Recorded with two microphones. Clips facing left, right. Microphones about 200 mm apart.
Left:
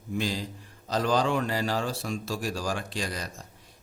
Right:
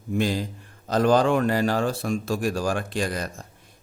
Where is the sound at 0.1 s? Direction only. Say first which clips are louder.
Right 6 dB; 55° right (ahead or behind).